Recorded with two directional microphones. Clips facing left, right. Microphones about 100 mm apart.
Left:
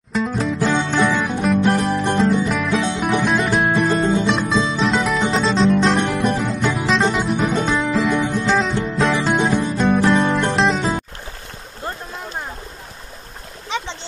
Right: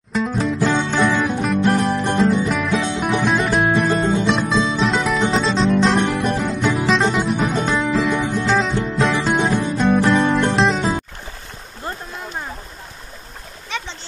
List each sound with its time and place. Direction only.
0.1 s music: centre (ahead or behind)
13.7 s splash: 20° left (ahead or behind)